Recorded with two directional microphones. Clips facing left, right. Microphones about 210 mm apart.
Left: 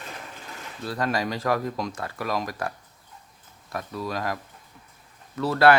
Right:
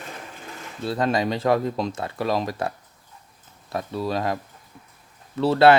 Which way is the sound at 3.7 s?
25° right (ahead or behind).